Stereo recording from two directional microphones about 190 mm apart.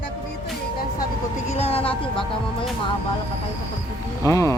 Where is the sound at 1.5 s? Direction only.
30° left (ahead or behind).